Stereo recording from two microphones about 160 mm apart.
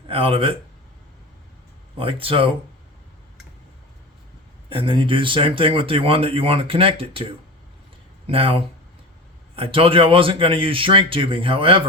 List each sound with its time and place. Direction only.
0.1 s speech: 35° right (ahead or behind)
2.0 s speech: 35° right (ahead or behind)
4.7 s speech: 35° right (ahead or behind)